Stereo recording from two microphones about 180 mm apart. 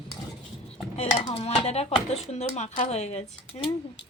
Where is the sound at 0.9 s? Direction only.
35° left (ahead or behind).